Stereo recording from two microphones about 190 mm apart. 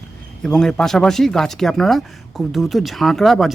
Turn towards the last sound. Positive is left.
turn(degrees=0)  # may be behind; listen again after turning